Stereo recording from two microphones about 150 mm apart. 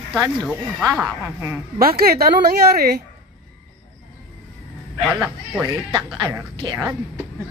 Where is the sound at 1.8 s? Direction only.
85° right.